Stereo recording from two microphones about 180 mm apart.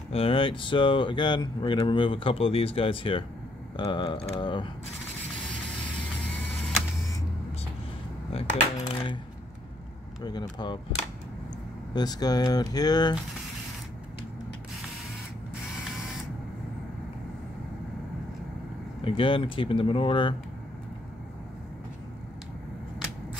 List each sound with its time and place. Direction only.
0.1 s speech: 30° left (ahead or behind)
8.3 s cutlery: 30° left (ahead or behind)
10.2 s speech: 25° left (ahead or behind)
11.9 s speech: 20° left (ahead or behind)
18.9 s speech: 30° left (ahead or behind)